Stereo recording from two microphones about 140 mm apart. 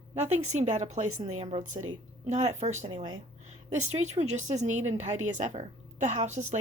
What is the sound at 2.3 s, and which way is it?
A woman's voice, 55° right (ahead or behind).